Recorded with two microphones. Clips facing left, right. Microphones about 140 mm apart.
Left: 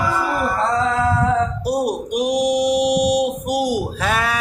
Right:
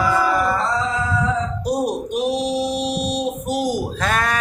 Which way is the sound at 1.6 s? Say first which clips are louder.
Left 1 dB; 10° left (ahead or behind).